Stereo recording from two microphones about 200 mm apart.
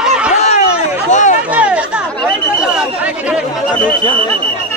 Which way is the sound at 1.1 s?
35° left (ahead or behind).